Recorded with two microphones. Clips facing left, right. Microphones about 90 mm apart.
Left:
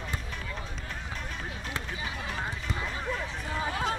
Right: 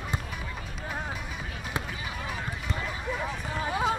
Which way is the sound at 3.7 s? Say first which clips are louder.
Right 4 dB; 10° right (ahead or behind).